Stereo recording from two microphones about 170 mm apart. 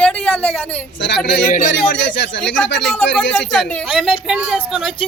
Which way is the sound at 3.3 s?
Centre (ahead or behind).